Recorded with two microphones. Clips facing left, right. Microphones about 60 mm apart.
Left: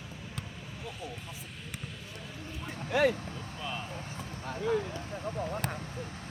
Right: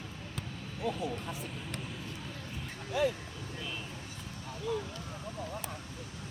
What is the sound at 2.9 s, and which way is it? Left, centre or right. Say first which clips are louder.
Vehicle: left 4 dB; left.